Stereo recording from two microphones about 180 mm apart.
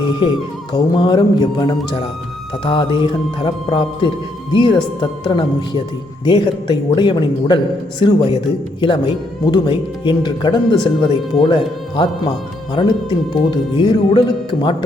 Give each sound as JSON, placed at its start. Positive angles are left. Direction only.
{"t": 0.0, "sound": "speech", "side_deg": 25}
{"t": 9.4, "sound": "speech", "side_deg": 25}